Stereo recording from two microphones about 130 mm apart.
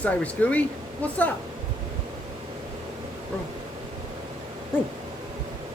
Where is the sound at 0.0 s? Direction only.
10° left (ahead or behind).